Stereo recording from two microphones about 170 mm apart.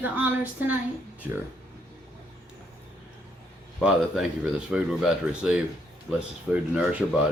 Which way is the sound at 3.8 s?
5° right (ahead or behind).